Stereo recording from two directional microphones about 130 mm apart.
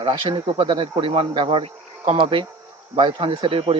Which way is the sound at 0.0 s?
40° right (ahead or behind).